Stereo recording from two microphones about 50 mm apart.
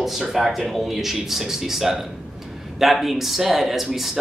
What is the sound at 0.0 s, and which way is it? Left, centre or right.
Speech, centre.